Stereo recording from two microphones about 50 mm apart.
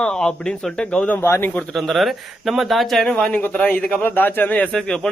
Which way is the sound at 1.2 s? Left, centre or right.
Left.